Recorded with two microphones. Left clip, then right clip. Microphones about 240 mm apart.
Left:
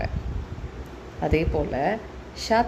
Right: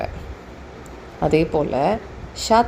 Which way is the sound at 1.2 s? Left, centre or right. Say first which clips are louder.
Right 6 dB; right.